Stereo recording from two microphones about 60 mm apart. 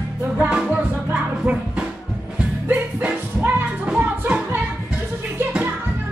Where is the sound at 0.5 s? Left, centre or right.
Centre.